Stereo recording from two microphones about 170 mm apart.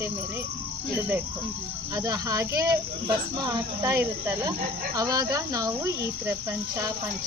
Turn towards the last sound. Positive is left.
turn(degrees=-20)  # may be behind; listen again after turning